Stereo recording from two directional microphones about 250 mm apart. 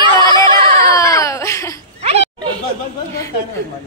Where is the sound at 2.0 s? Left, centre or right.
Right.